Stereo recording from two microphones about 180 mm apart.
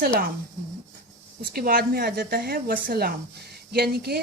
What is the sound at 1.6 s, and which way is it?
Speech, 55° right (ahead or behind).